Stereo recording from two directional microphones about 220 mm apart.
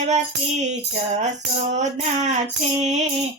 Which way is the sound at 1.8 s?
30° right (ahead or behind).